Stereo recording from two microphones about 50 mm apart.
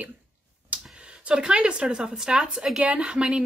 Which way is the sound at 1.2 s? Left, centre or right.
Centre.